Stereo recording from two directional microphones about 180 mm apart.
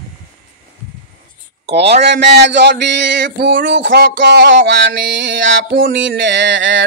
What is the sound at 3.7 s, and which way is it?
Music, 80° right.